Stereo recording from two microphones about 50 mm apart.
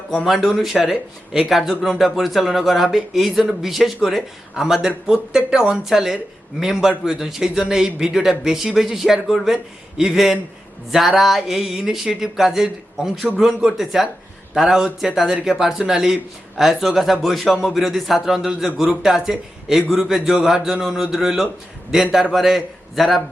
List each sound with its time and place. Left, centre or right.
0.3 s speech: centre